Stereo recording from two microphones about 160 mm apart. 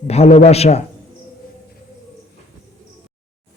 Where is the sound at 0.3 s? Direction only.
40° left (ahead or behind).